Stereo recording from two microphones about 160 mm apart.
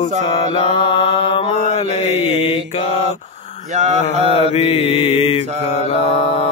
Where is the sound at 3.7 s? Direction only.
45° right (ahead or behind).